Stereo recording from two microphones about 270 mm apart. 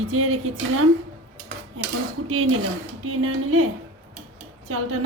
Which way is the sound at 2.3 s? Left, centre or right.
Right.